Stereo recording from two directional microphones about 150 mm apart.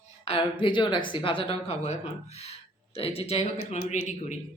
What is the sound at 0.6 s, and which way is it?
Speech, 30° left (ahead or behind).